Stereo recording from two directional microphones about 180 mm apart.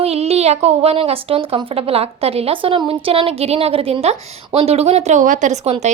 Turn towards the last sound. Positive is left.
turn(degrees=-35)  # may be behind; listen again after turning